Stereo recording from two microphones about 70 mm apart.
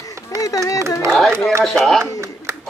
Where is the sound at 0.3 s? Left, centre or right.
Left.